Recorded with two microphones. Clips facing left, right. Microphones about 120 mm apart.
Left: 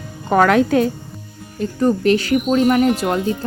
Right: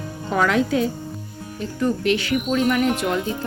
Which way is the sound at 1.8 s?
40° left (ahead or behind).